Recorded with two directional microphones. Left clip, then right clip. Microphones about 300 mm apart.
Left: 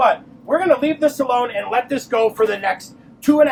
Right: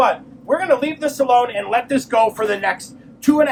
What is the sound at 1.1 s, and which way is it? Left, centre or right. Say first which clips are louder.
Speech: right 3 dB; right.